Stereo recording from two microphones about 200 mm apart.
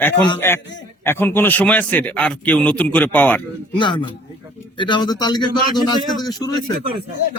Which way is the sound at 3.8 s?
25° left (ahead or behind).